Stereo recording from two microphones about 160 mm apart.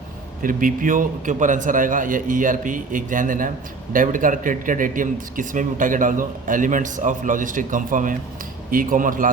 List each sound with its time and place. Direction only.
0.4 s speech: 60° right (ahead or behind)